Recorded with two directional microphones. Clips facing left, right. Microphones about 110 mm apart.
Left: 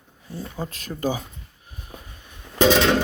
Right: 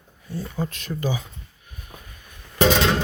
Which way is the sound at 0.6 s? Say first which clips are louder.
Left 2 dB; 35° left (ahead or behind).